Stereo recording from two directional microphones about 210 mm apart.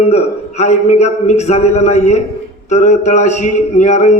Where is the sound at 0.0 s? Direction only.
30° left (ahead or behind).